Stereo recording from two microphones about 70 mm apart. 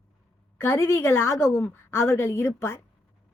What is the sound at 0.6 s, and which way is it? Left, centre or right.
Speech, left.